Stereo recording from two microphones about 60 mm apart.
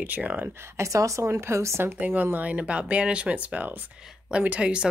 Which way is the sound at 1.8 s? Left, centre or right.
Right.